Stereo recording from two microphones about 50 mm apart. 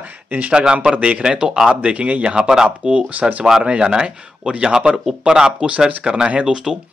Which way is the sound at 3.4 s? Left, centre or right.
Centre.